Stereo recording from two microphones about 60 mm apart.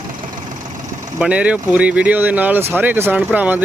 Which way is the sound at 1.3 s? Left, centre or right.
Right.